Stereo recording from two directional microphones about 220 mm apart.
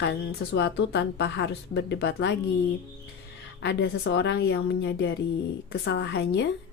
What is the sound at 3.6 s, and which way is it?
A woman's voice, 50° left (ahead or behind).